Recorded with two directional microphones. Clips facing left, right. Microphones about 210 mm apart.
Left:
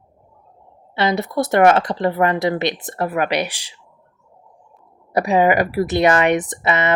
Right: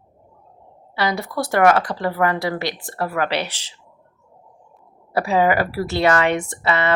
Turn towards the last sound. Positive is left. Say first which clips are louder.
# left 1 dB
turn(degrees=20)  # may be behind; listen again after turning